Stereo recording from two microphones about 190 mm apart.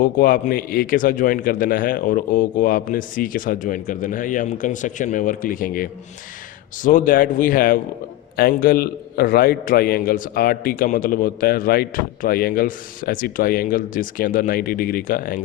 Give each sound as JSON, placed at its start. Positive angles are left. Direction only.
{"t": 0.0, "sound": "a man's voice", "side_deg": 45}